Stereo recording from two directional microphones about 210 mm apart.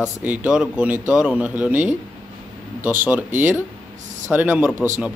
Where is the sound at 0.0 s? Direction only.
5° right (ahead or behind).